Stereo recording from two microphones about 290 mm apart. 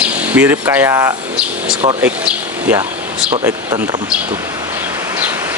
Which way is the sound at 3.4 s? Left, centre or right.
Centre.